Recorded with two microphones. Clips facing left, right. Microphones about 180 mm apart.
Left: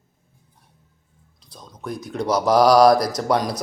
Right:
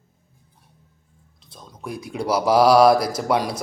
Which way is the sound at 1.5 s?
5° right (ahead or behind).